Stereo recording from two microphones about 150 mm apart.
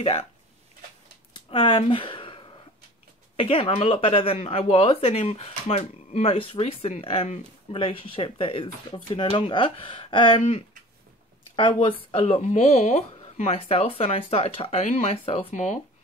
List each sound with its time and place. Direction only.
0.0 s speech: 40° left (ahead or behind)
1.3 s a sound: 35° left (ahead or behind)
3.3 s speech: 35° left (ahead or behind); by 13.0 s 55° left (ahead or behind)
13.4 s speech: 40° left (ahead or behind)